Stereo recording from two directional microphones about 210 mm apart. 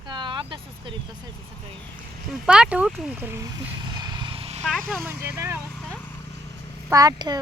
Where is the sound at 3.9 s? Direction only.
20° right (ahead or behind).